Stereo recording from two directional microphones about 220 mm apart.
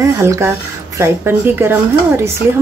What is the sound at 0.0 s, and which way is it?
A woman's voice, 15° right (ahead or behind).